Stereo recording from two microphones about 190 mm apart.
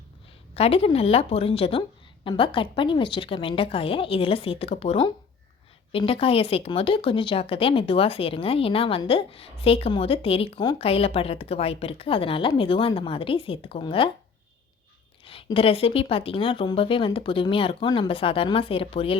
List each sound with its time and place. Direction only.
0.5 s a woman's voice: 30° left (ahead or behind)
15.2 s speech: 30° left (ahead or behind)